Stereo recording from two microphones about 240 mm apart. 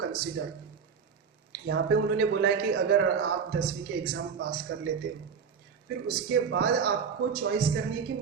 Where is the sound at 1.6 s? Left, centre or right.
Right.